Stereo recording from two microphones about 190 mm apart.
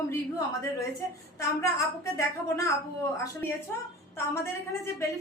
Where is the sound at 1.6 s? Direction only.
15° left (ahead or behind).